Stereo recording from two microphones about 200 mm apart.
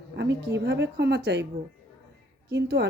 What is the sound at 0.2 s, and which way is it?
Speech, 60° right (ahead or behind).